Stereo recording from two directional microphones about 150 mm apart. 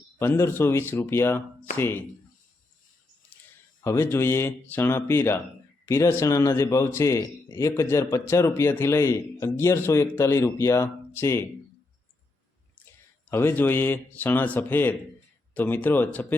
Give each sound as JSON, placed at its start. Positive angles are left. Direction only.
{"t": 0.2, "sound": "a man's voice", "side_deg": 15}
{"t": 3.8, "sound": "a man's voice", "side_deg": 15}
{"t": 13.3, "sound": "a man's voice", "side_deg": 15}